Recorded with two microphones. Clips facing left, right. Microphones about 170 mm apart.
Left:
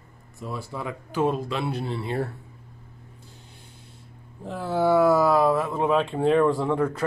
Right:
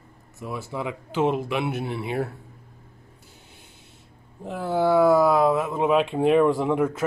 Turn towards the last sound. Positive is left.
turn(degrees=-15)  # may be behind; listen again after turning